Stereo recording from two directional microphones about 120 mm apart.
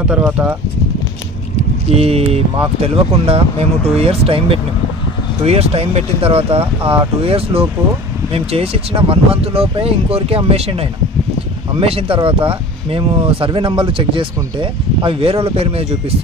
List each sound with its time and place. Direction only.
0.2 s speech: 15° right (ahead or behind)
2.0 s speech: 55° right (ahead or behind)